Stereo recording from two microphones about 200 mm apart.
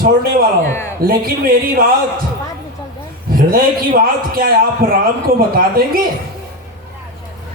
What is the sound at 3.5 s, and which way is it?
A man's voice, 45° right (ahead or behind).